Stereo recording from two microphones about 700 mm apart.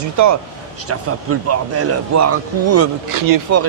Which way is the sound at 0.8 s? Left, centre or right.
Centre.